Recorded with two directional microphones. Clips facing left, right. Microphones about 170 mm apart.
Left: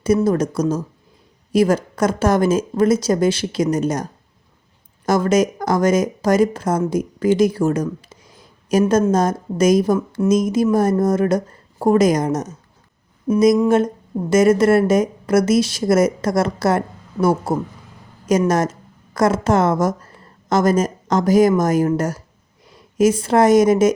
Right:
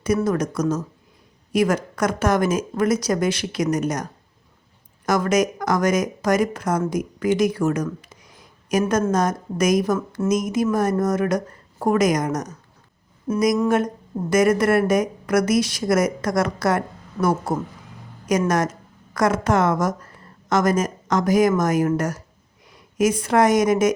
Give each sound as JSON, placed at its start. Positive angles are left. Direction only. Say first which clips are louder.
{"t": 0.3, "sound": "a woman's voice", "louder": "left 3 dB", "side_deg": 30}
{"t": 13.7, "sound": "a woman's voice", "louder": "left 4 dB", "side_deg": 25}